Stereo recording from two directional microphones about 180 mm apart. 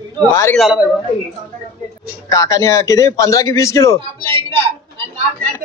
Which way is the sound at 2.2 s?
20° left (ahead or behind).